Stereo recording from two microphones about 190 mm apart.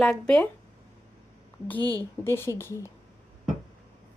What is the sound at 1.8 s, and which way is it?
Speech, 20° right (ahead or behind).